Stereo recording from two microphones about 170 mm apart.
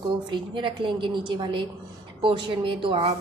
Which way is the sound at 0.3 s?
30° right (ahead or behind).